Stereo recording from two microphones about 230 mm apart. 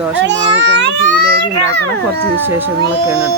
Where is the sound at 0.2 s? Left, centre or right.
Right.